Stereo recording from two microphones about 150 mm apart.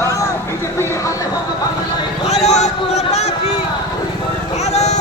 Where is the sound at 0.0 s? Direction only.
20° left (ahead or behind).